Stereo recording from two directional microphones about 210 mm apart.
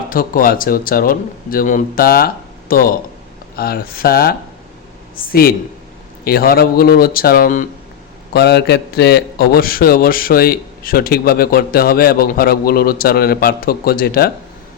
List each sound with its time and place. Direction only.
0.1 s a man's voice: 45° left (ahead or behind)
8.3 s a man's voice: 50° left (ahead or behind)